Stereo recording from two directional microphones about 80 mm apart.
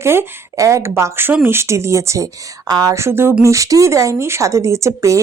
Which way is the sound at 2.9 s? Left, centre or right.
Right.